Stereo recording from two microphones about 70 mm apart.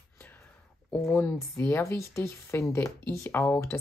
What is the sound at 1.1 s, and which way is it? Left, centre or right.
Speech, left.